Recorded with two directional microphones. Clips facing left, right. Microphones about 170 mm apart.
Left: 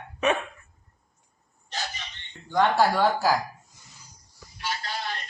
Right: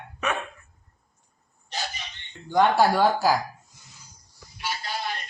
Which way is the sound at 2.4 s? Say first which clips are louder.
Right 2 dB; 10° right (ahead or behind).